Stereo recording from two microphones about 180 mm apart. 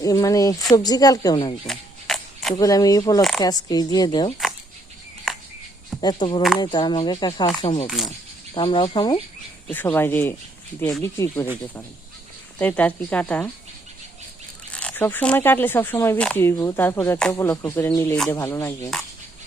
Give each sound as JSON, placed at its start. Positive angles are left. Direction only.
{"t": 0.0, "sound": "a woman's voice", "side_deg": 20}
{"t": 1.6, "sound": "camera", "side_deg": 0}
{"t": 2.6, "sound": "a woman's voice", "side_deg": 20}
{"t": 3.2, "sound": "speech", "side_deg": 0}
{"t": 3.4, "sound": "a woman's voice", "side_deg": 20}
{"t": 6.0, "sound": "a woman's voice", "side_deg": 25}
{"t": 7.4, "sound": "a woman's voice", "side_deg": 35}
{"t": 9.6, "sound": "speech", "side_deg": 10}
{"t": 12.5, "sound": "speech", "side_deg": 10}
{"t": 14.7, "sound": "speech", "side_deg": 5}